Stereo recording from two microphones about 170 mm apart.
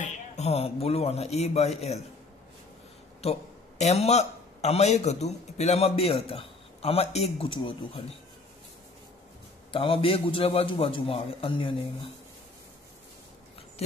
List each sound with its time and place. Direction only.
0.0 s speech: 40° left (ahead or behind)
3.2 s a man's voice: 40° left (ahead or behind)
9.7 s a man's voice: 30° left (ahead or behind)